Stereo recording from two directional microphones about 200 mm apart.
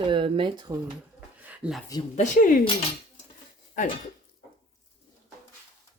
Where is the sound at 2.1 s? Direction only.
35° left (ahead or behind).